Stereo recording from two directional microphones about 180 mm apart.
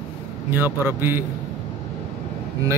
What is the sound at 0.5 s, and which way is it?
Speech, 10° right (ahead or behind).